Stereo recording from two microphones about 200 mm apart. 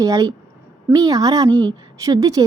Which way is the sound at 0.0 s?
20° right (ahead or behind).